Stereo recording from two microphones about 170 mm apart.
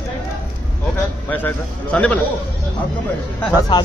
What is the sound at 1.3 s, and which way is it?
Speech, 10° left (ahead or behind).